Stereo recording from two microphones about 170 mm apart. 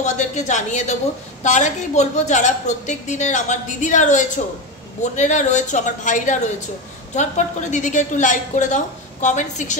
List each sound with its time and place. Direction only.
0.0 s a woman's voice: 45° left (ahead or behind)